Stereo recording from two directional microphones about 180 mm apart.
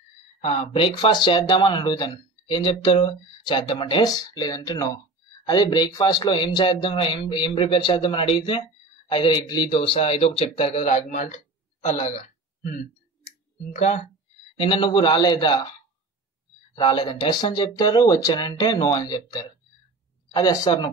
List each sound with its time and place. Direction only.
0.4 s a man's voice: 35° left (ahead or behind)
11.1 s speech: 45° left (ahead or behind)
13.7 s speech: 40° left (ahead or behind)
14.6 s speech: 30° left (ahead or behind)
16.7 s speech: 25° left (ahead or behind)
20.3 s speech: 20° left (ahead or behind)